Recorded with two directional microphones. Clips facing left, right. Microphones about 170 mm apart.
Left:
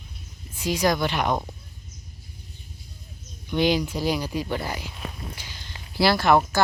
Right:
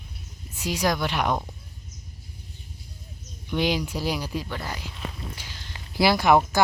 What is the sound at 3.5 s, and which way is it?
Speech, 5° right (ahead or behind).